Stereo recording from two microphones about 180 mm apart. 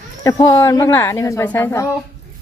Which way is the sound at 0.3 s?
15° left (ahead or behind).